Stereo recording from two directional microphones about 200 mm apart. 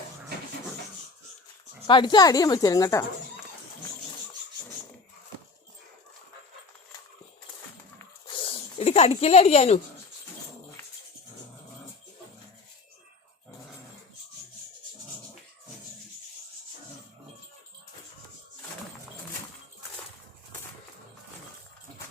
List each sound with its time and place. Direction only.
1.9 s a woman's voice: 20° left (ahead or behind)
8.4 s speech: 30° left (ahead or behind)